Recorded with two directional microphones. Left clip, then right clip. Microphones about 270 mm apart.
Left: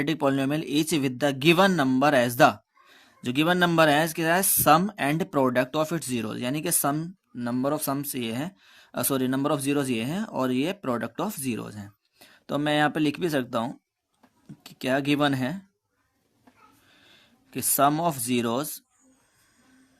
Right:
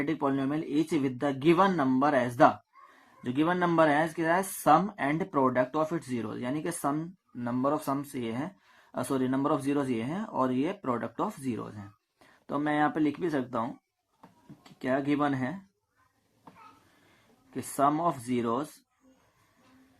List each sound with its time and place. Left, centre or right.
0.0 s speech: left
17.5 s speech: left